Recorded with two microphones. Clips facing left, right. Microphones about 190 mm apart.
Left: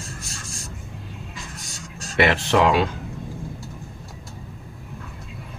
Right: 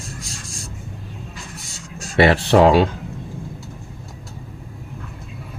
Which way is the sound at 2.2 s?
35° right (ahead or behind).